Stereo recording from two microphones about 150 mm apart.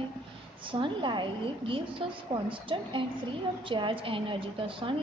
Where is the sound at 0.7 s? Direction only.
35° right (ahead or behind).